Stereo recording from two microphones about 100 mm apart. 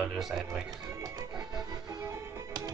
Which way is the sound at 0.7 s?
35° right (ahead or behind).